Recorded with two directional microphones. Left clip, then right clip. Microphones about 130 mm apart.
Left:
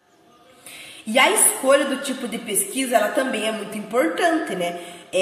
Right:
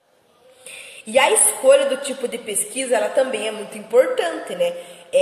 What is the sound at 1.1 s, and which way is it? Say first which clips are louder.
A woman's voice: right 1 dB; 30° right (ahead or behind).